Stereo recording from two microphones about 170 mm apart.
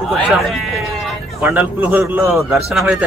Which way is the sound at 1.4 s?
10° right (ahead or behind).